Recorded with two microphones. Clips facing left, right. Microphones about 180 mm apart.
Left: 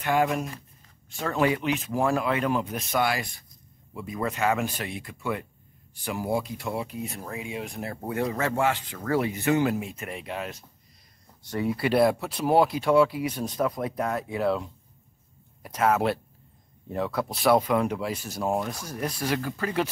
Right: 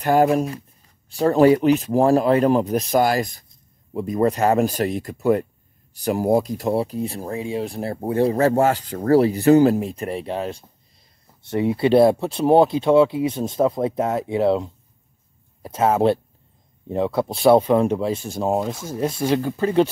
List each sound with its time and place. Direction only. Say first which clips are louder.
0.0 s speech: right 8 dB; 40° right (ahead or behind)